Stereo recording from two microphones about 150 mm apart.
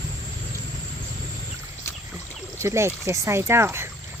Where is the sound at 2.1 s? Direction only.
20° right (ahead or behind).